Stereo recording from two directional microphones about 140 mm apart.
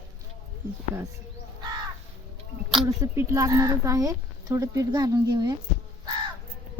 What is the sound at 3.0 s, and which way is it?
Speech, 20° right (ahead or behind).